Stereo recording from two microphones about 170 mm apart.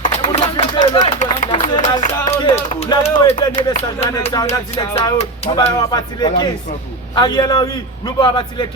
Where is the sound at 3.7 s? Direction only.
40° left (ahead or behind).